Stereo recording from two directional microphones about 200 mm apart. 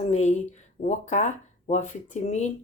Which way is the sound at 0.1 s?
35° left (ahead or behind).